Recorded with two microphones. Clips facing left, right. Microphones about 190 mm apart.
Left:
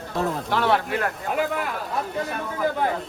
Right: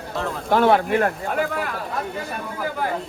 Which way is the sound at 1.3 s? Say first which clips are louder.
Right 1 dB; centre (ahead or behind).